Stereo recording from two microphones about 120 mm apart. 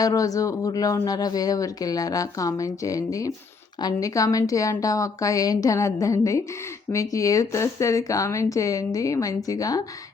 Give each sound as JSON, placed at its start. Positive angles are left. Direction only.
{"t": 0.0, "sound": "speech", "side_deg": 30}